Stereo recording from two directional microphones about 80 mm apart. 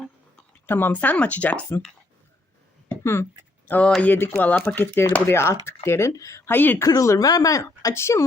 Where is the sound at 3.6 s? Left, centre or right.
Centre.